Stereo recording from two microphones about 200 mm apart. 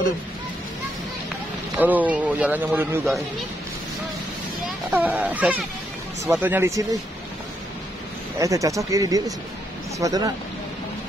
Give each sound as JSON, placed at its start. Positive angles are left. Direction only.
{"t": 1.8, "sound": "speech", "side_deg": -10}
{"t": 4.9, "sound": "speech", "side_deg": -10}
{"t": 8.4, "sound": "speech", "side_deg": -15}